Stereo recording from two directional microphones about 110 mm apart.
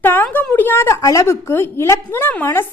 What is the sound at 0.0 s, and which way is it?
A woman's voice, 20° left (ahead or behind).